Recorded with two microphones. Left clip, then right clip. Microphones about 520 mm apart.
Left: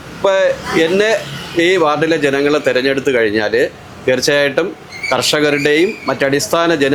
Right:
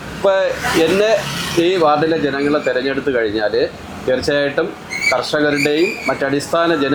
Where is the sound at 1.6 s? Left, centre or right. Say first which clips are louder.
Left 1 dB; left.